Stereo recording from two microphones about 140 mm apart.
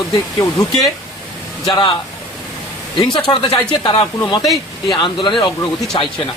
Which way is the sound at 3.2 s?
35° left (ahead or behind).